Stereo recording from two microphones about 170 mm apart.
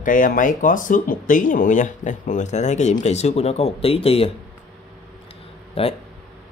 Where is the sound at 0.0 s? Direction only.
50° left (ahead or behind); by 4.3 s 35° left (ahead or behind).